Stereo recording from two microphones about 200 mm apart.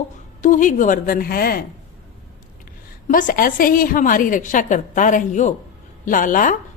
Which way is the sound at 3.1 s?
40° left (ahead or behind).